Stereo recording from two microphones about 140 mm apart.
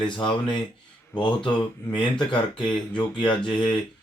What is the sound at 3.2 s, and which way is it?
Speech, 5° left (ahead or behind).